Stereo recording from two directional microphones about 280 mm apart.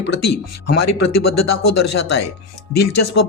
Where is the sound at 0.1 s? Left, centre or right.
Left.